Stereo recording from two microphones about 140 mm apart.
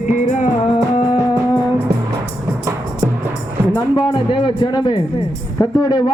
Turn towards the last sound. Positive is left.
turn(degrees=30)  # may be behind; listen again after turning